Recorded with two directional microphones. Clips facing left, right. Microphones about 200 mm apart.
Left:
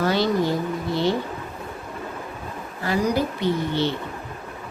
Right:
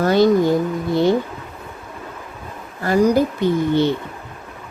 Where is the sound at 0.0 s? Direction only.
50° right (ahead or behind).